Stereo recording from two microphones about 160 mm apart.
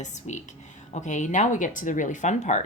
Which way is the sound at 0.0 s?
50° left (ahead or behind).